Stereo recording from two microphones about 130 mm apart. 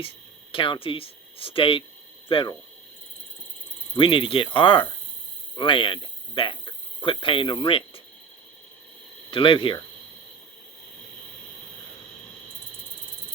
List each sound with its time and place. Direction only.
0.5 s speech: 40° left (ahead or behind)
3.9 s speech: 40° left (ahead or behind)
9.3 s speech: 40° left (ahead or behind)